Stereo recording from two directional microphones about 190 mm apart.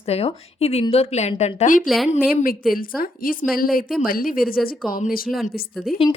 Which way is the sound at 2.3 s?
50° left (ahead or behind).